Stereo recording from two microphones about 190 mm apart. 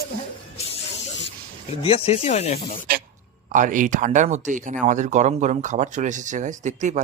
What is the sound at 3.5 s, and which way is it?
Speech, 45° right (ahead or behind).